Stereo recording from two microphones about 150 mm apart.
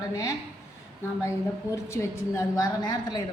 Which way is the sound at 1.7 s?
20° left (ahead or behind).